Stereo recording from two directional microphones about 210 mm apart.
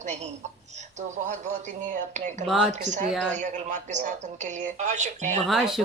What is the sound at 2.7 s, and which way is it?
Speech, 35° right (ahead or behind).